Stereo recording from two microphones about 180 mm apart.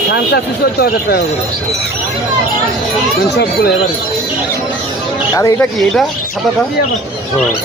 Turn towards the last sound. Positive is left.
turn(degrees=15)  # may be behind; listen again after turning